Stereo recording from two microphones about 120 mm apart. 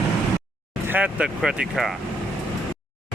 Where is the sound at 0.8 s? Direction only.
15° right (ahead or behind).